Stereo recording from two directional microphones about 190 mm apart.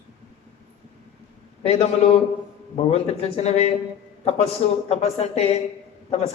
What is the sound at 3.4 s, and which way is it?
A man's voice, 35° left (ahead or behind).